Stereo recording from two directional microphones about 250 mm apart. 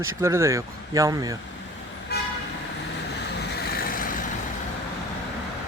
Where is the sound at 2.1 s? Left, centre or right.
Left.